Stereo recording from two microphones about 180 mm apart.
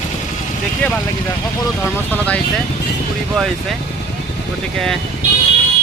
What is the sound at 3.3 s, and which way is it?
Speech, centre (ahead or behind).